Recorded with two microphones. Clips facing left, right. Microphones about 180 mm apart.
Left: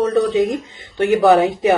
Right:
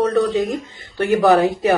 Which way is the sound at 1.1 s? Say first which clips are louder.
Left 1 dB; centre (ahead or behind).